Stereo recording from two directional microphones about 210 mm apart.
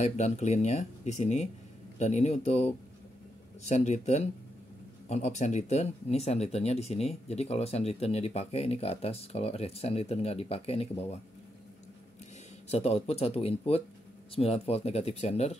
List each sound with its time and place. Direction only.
0.0 s speech: 30° left (ahead or behind)
12.6 s speech: 30° left (ahead or behind)